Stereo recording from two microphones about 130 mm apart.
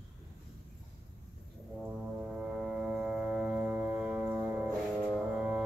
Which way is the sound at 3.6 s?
15° right (ahead or behind).